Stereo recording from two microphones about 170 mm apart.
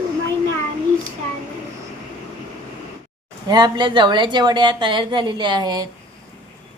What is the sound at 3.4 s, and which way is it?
A woman's voice, 25° right (ahead or behind).